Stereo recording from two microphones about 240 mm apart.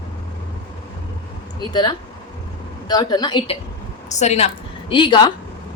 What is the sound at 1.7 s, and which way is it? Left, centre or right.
A woman's voice, centre.